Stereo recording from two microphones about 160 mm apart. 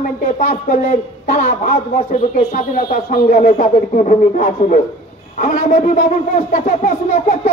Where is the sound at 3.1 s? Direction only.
55° left (ahead or behind).